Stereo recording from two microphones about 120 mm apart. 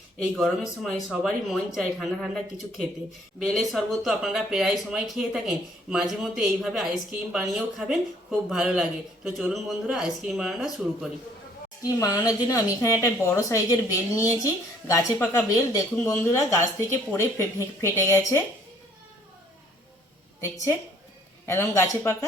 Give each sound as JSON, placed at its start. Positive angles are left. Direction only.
{"t": 0.3, "sound": "speech", "side_deg": 0}
{"t": 11.8, "sound": "speech", "side_deg": 30}
{"t": 20.4, "sound": "speech", "side_deg": 20}